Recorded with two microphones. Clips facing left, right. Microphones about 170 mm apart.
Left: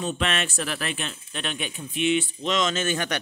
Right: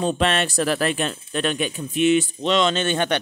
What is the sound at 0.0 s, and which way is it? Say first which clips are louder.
Speech: right 6 dB; 35° right (ahead or behind).